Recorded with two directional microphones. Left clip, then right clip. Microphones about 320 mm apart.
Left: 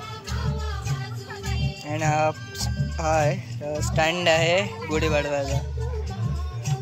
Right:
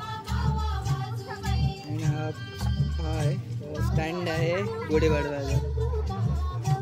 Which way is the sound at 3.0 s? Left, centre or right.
Centre.